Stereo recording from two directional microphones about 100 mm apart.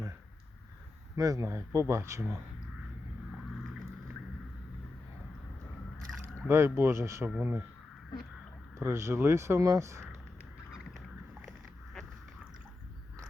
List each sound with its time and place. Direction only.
1.1 s speech: 35° right (ahead or behind)
6.5 s speech: 25° right (ahead or behind)
8.8 s speech: 25° right (ahead or behind)